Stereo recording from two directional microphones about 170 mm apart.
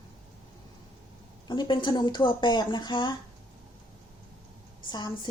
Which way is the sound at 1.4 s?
25° left (ahead or behind).